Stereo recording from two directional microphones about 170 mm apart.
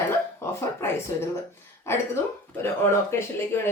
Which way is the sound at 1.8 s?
15° left (ahead or behind).